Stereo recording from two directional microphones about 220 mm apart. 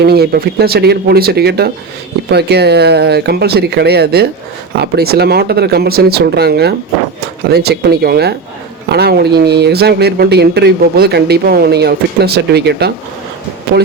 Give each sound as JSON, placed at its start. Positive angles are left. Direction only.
{"t": 0.0, "sound": "speech", "side_deg": -45}